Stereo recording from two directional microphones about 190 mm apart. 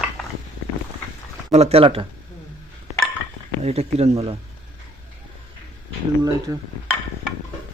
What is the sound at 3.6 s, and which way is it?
Speech, 35° right (ahead or behind).